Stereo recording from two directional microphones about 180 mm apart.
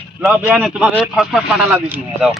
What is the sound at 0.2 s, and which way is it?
Speech, 5° right (ahead or behind).